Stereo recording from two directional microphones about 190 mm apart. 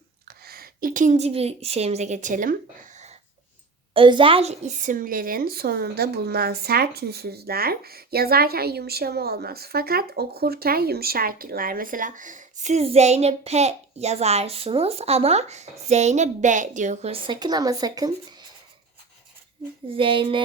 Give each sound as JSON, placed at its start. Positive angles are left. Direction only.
{"t": 0.3, "sound": "a woman's voice", "side_deg": -55}
{"t": 3.9, "sound": "a woman's voice", "side_deg": -25}
{"t": 20.0, "sound": "a sound", "side_deg": -25}